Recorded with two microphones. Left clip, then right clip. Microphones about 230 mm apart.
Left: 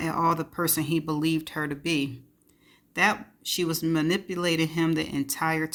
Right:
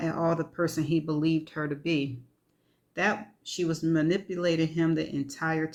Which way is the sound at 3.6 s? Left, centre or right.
Left.